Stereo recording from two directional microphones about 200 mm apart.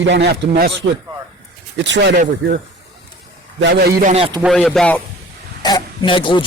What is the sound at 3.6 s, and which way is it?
Speech, 60° right (ahead or behind).